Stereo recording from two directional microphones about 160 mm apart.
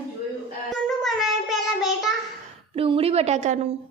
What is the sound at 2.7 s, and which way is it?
Speech, 35° right (ahead or behind).